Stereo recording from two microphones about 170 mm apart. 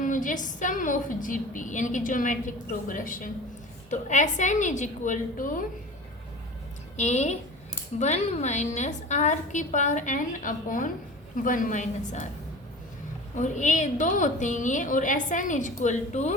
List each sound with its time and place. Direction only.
0.0 s a woman's voice: 50° left (ahead or behind)
6.9 s a woman's voice: 45° left (ahead or behind)
13.3 s a woman's voice: 45° left (ahead or behind)